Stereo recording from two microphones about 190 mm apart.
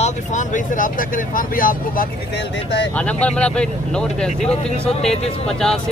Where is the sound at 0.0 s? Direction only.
40° left (ahead or behind).